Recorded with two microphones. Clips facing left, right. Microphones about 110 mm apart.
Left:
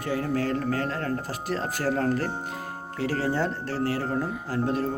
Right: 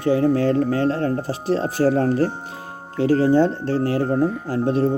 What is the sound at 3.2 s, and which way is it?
Speech, 30° right (ahead or behind).